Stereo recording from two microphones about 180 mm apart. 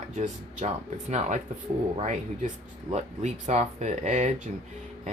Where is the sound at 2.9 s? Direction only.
35° right (ahead or behind).